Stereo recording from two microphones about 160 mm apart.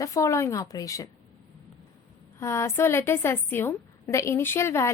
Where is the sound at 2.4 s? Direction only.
15° left (ahead or behind).